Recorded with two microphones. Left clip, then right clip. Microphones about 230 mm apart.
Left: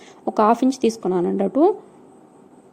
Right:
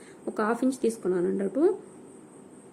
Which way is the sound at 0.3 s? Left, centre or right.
Left.